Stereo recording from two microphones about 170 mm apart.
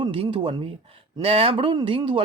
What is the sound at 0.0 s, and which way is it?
Speech, 30° right (ahead or behind).